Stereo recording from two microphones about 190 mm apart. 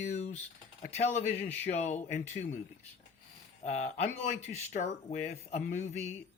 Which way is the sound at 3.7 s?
35° left (ahead or behind).